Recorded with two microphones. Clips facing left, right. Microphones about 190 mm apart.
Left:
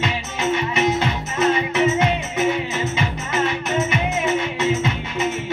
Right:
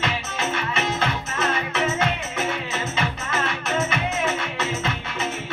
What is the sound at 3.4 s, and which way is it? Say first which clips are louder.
Music: left 4 dB; 15° left (ahead or behind).